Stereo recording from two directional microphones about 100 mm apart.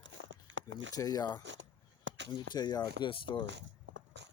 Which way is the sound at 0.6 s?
35° left (ahead or behind).